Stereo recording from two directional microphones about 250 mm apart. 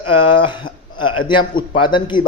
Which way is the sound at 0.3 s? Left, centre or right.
Centre.